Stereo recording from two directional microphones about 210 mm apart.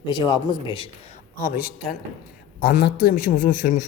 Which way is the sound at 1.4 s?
40° left (ahead or behind).